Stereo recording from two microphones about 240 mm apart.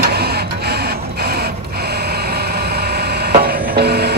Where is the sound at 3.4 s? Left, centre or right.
Right.